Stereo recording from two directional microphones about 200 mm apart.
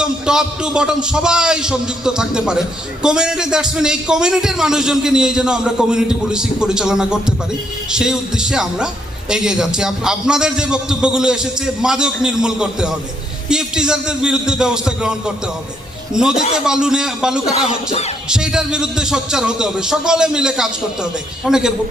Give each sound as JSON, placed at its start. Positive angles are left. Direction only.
{"t": 0.0, "sound": "a man's voice", "side_deg": -5}
{"t": 16.1, "sound": "a man's voice", "side_deg": -5}
{"t": 17.7, "sound": "music", "side_deg": 30}
{"t": 18.3, "sound": "a man's voice", "side_deg": -5}